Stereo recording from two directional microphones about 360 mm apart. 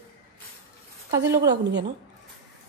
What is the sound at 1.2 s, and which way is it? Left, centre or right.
Speech, centre.